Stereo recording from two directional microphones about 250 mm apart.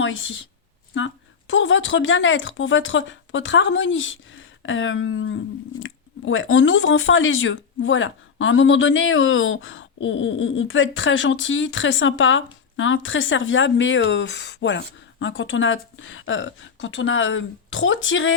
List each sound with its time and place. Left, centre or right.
0.0 s a woman's voice: left